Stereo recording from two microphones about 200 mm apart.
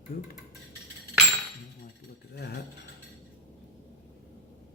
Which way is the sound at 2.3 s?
50° left (ahead or behind).